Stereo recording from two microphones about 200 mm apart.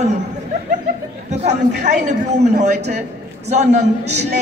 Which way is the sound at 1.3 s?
35° right (ahead or behind).